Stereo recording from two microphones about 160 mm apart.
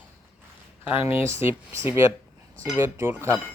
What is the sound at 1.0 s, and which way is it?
Speech, 15° right (ahead or behind).